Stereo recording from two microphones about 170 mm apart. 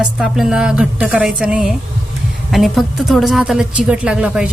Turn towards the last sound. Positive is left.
turn(degrees=-5)  # may be behind; listen again after turning